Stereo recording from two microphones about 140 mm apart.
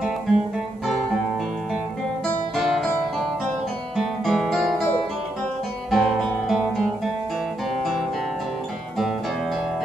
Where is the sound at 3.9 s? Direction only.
Centre (ahead or behind).